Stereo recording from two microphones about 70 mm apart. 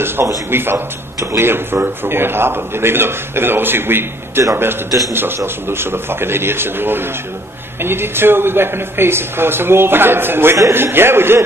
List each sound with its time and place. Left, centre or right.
0.0 s a man's voice: right